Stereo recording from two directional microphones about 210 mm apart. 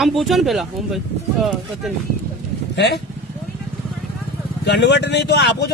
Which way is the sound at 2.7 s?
55° left (ahead or behind).